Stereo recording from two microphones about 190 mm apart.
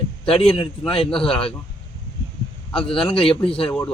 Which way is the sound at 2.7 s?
30° left (ahead or behind).